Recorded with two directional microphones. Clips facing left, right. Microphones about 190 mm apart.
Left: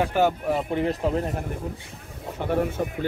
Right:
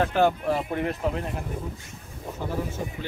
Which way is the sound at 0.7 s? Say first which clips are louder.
Left 3 dB; 35° left (ahead or behind).